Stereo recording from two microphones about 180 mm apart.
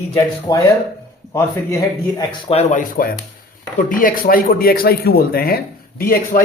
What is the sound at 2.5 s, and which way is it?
Speech, 35° left (ahead or behind).